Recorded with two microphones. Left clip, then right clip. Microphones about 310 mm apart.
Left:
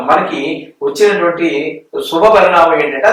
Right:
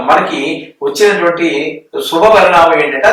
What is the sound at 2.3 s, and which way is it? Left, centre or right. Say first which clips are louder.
Speech: right 2 dB; centre.